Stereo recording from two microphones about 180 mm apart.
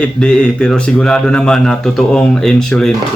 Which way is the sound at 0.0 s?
5° left (ahead or behind).